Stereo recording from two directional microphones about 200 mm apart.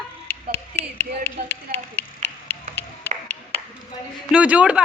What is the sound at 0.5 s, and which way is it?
Speech, 10° left (ahead or behind).